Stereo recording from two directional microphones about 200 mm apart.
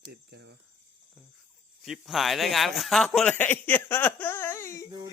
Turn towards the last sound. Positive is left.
turn(degrees=15)  # may be behind; listen again after turning